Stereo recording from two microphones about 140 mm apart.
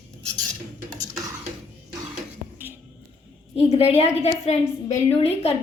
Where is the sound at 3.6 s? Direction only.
45° left (ahead or behind).